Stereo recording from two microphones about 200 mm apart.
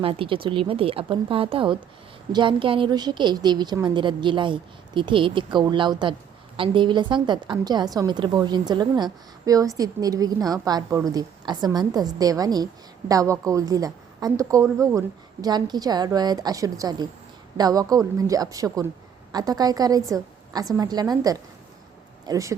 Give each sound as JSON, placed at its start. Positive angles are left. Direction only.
{"t": 0.0, "sound": "a woman's voice", "side_deg": -25}